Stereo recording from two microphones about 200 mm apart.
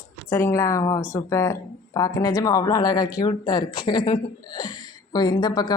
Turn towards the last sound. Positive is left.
turn(degrees=20)  # may be behind; listen again after turning